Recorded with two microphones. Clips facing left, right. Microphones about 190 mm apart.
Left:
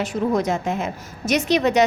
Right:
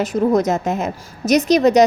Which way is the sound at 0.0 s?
40° right (ahead or behind).